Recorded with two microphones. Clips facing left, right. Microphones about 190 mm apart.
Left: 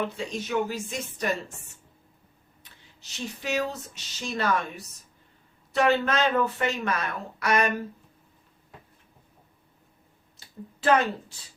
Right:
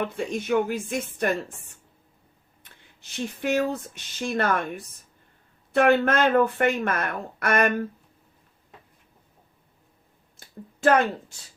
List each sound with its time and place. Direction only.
0.0 s speech: 55° right (ahead or behind)
3.0 s speech: 55° right (ahead or behind)
10.3 s a sound: 50° right (ahead or behind)